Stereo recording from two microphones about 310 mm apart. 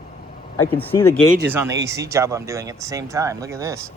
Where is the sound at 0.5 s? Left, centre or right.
Centre.